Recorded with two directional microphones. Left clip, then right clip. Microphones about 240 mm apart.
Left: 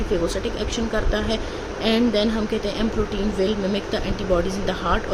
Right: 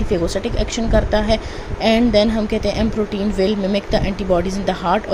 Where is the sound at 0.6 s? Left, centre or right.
Right.